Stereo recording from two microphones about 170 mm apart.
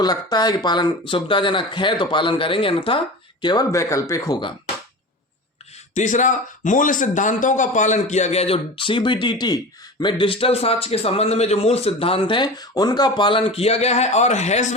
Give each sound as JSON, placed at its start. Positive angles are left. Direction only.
{"t": 0.0, "sound": "speech", "side_deg": 25}
{"t": 5.9, "sound": "a man's voice", "side_deg": 45}